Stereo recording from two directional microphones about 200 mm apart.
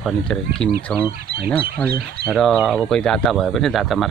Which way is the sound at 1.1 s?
50° right (ahead or behind).